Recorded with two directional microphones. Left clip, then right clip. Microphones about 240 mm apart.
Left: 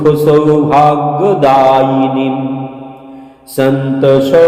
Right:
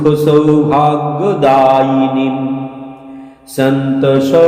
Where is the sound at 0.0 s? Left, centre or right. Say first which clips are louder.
Left 2 dB; centre.